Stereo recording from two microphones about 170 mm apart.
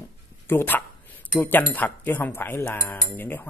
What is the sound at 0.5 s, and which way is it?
Speech, 10° left (ahead or behind).